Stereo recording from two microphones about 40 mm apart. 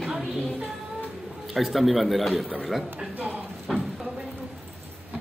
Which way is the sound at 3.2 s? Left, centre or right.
Right.